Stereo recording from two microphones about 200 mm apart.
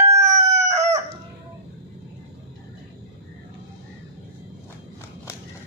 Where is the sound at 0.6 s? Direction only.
35° right (ahead or behind).